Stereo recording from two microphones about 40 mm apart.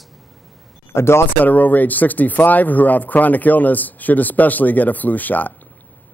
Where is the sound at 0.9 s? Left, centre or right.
Left.